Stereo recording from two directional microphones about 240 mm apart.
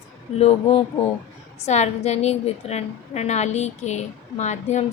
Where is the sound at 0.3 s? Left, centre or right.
Left.